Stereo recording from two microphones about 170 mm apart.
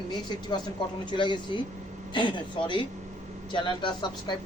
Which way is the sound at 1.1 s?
30° left (ahead or behind).